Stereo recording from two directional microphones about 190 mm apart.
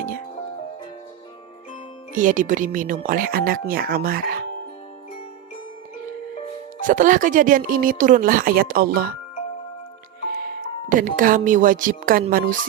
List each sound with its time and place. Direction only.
2.1 s speech: 45° right (ahead or behind)
6.8 s speech: 45° right (ahead or behind)
10.3 s speech: 50° right (ahead or behind)